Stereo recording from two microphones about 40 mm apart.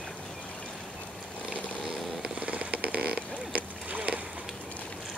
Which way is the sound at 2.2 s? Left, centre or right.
Right.